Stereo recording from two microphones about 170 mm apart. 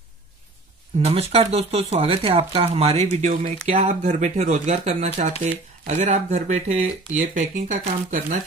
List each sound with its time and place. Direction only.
1.3 s speech: 35° right (ahead or behind)